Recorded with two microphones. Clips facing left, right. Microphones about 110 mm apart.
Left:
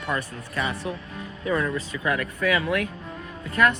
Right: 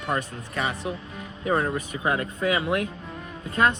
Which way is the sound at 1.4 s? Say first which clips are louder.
Right 1 dB; 35° right (ahead or behind).